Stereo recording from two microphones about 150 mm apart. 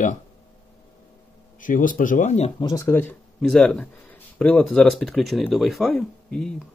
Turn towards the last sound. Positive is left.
turn(degrees=5)  # may be behind; listen again after turning